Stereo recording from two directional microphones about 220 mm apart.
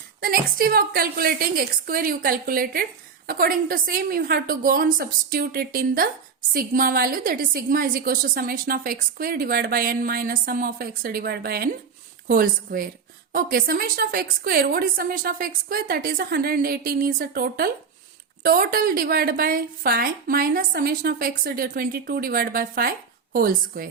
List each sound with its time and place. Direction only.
0.2 s a woman's voice: 40° right (ahead or behind)